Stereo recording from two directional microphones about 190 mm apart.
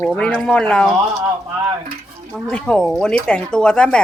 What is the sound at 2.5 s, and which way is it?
Speech, 5° left (ahead or behind).